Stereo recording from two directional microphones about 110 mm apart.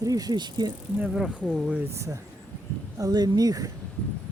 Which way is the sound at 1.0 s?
5° right (ahead or behind).